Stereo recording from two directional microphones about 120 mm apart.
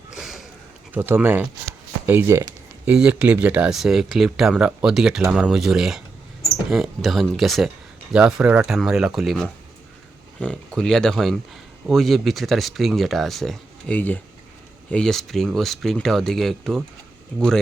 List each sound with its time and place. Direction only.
0.2 s a sound: centre (ahead or behind)
0.9 s speech: 15° right (ahead or behind)
2.8 s speech: 10° right (ahead or behind)
13.9 s speech: 15° left (ahead or behind)